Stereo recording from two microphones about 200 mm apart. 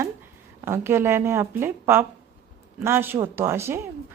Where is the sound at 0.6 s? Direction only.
10° right (ahead or behind).